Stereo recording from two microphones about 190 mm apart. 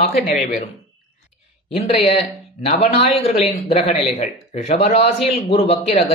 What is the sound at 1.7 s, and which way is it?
Speech, 30° left (ahead or behind).